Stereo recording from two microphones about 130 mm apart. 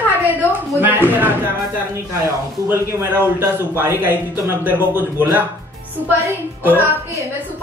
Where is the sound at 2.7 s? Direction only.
20° right (ahead or behind).